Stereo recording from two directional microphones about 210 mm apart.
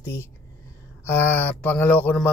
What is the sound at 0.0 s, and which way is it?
Speech, 10° left (ahead or behind).